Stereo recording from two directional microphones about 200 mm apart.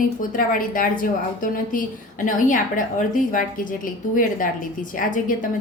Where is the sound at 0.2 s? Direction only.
45° left (ahead or behind).